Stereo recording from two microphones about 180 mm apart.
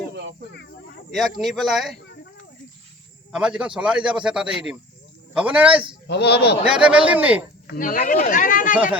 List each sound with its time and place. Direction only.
1.1 s a man's voice: centre (ahead or behind)
3.3 s a man's voice: 5° right (ahead or behind)
6.1 s a man's voice: 70° left (ahead or behind)
6.7 s speech: 5° right (ahead or behind)
7.7 s speech: 50° left (ahead or behind)
8.7 s speech: 5° right (ahead or behind)